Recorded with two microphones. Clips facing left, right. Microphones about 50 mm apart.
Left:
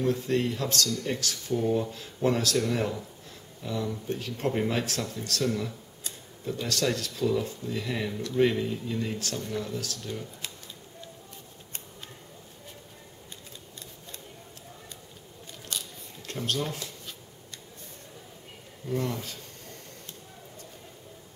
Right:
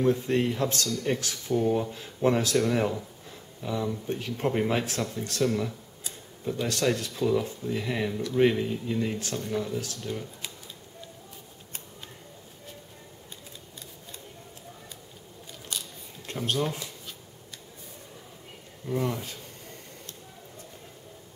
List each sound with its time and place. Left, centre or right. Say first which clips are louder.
0.0 s speech: right 2 dB; centre
8.1 s speech: right 1 dB; centre
15.7 s a sound: even; centre
16.3 s speech: right 2 dB; centre
18.9 s speech: right 1 dB; centre